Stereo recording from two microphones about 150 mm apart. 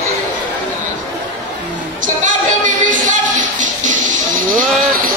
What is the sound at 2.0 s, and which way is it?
Music, 60° right (ahead or behind).